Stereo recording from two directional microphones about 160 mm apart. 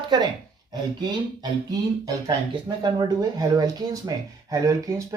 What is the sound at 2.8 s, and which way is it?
Speech, 25° right (ahead or behind).